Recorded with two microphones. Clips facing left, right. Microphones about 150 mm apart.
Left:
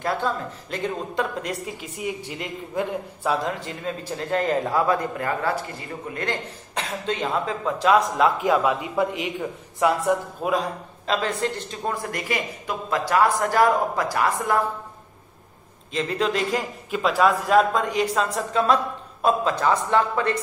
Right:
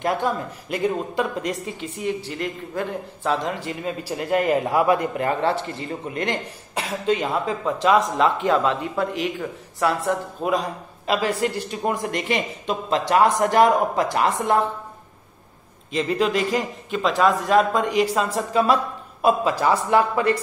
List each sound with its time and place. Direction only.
0.0 s speech: 15° right (ahead or behind); by 3.3 s 15° left (ahead or behind)
3.4 s a man's voice: 5° right (ahead or behind); by 10.1 s 15° left (ahead or behind)
10.4 s a man's voice: centre (ahead or behind); by 14.7 s 25° right (ahead or behind)
15.9 s a man's voice: centre (ahead or behind)